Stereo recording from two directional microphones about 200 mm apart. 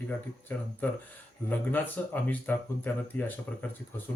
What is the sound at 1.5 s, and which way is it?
Speech, 10° left (ahead or behind).